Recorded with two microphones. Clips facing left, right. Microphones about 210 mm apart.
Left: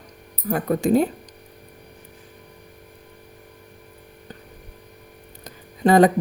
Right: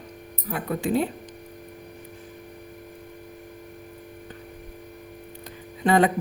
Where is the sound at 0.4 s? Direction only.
45° left (ahead or behind).